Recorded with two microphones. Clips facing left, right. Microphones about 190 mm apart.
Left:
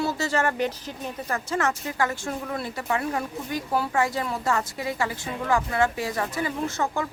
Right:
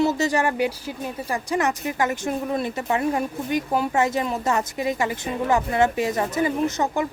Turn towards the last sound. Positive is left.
turn(degrees=-20)  # may be behind; listen again after turning